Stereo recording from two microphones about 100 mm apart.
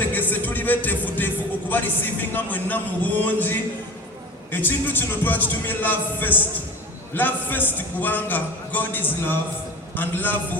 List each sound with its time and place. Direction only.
0.1 s music: 20° left (ahead or behind)
2.3 s a man's voice: 20° left (ahead or behind)